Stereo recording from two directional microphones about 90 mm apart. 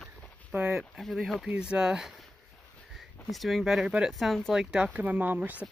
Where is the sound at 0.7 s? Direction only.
Centre (ahead or behind).